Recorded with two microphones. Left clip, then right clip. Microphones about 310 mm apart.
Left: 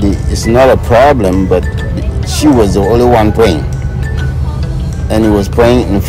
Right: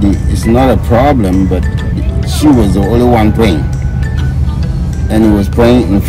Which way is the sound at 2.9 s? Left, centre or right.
Centre.